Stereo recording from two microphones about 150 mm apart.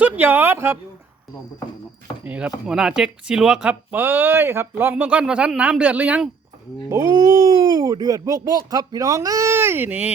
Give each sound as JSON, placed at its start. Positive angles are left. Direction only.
{"t": 0.0, "sound": "speech", "side_deg": -10}
{"t": 2.2, "sound": "speech", "side_deg": -10}
{"t": 6.9, "sound": "speech", "side_deg": -20}